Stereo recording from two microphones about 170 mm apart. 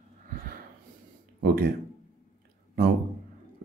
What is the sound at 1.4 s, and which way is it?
Speech, 60° right (ahead or behind).